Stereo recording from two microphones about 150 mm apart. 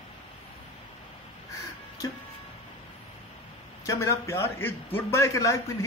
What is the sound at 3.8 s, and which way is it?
A man's voice, 20° left (ahead or behind).